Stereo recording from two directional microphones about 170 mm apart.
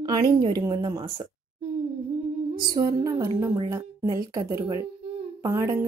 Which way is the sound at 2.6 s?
20° right (ahead or behind).